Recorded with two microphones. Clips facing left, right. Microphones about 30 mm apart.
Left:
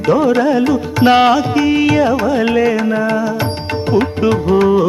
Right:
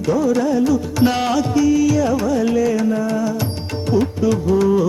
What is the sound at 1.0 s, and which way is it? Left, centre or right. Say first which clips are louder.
Music: left 9 dB; left.